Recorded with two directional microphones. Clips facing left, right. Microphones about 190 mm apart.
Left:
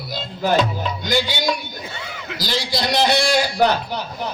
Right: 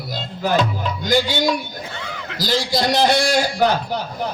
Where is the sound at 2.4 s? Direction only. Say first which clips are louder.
Right 4 dB; 45° right (ahead or behind).